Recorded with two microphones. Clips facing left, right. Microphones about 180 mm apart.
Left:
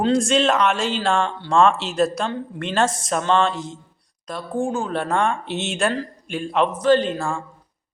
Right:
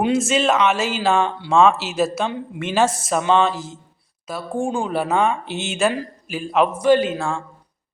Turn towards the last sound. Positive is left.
turn(degrees=0)  # may be behind; listen again after turning